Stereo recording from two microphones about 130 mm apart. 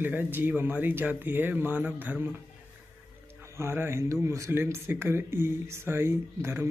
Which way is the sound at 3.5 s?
20° right (ahead or behind).